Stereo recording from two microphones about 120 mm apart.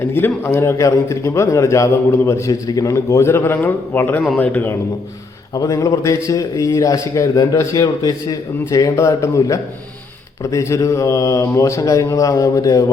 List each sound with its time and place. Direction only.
0.0 s a man's voice: 20° left (ahead or behind)
5.5 s a man's voice: 25° left (ahead or behind)